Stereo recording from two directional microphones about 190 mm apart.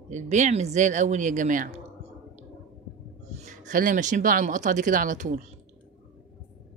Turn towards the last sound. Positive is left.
turn(degrees=-40)  # may be behind; listen again after turning